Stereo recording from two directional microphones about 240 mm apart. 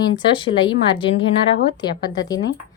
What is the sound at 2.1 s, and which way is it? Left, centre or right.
Speech, centre.